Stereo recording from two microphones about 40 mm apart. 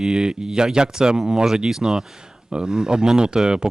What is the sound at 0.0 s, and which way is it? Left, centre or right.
Speech, centre.